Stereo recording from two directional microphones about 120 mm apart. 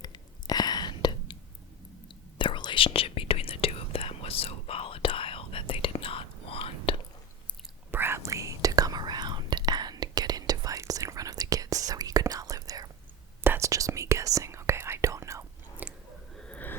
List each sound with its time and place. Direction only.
0.0 s whispering: 35° left (ahead or behind)
2.4 s whispering: 40° left (ahead or behind)
7.9 s whispering: 20° right (ahead or behind)
15.8 s chewing: 15° right (ahead or behind)
16.4 s a sound: 10° left (ahead or behind)